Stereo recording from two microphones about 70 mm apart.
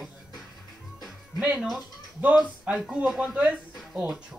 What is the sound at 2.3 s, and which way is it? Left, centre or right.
Speech, right.